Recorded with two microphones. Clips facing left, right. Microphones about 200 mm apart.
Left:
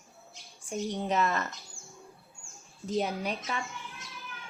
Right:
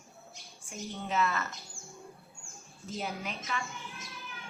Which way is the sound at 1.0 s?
40° left (ahead or behind).